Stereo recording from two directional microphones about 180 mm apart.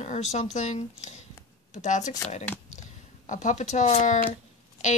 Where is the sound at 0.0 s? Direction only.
40° left (ahead or behind).